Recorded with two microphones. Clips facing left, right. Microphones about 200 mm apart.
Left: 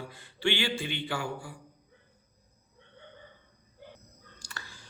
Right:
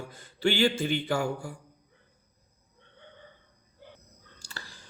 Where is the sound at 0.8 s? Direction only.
40° right (ahead or behind).